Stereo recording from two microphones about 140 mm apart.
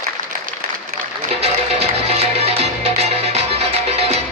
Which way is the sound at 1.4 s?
50° right (ahead or behind).